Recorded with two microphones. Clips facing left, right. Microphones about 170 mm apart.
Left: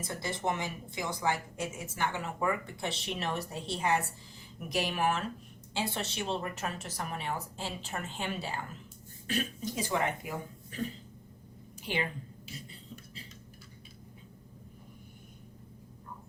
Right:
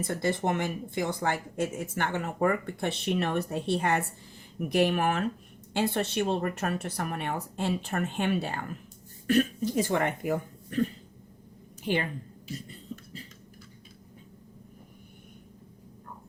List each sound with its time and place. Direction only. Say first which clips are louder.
0.0 s a woman's voice: right 6 dB; 55° right (ahead or behind)
11.9 s a woman's voice: right 6 dB; 50° right (ahead or behind)